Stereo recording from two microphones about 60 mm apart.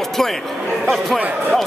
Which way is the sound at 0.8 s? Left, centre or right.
Centre.